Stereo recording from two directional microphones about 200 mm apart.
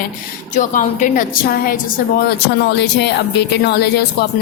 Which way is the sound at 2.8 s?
60° left (ahead or behind).